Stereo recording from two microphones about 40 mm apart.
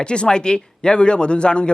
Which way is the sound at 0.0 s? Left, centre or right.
Left.